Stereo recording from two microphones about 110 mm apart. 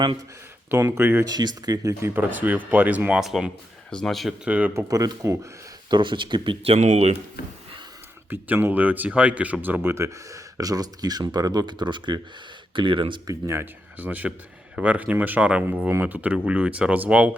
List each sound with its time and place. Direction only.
0.7 s speech: 20° right (ahead or behind)
1.3 s speech: 40° right (ahead or behind); by 3.2 s 10° right (ahead or behind)
3.2 s speech: centre (ahead or behind)
4.4 s speech: 15° right (ahead or behind)
4.7 s speech: 30° right (ahead or behind)
5.9 s speech: 45° right (ahead or behind)
6.7 s speech: 90° right
8.3 s speech: 20° right (ahead or behind); by 13.1 s 50° right (ahead or behind)
13.2 s speech: 25° right (ahead or behind)